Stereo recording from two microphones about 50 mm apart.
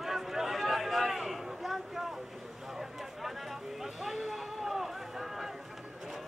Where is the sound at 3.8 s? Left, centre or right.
Centre.